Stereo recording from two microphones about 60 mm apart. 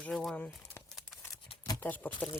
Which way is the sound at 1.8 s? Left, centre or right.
Left.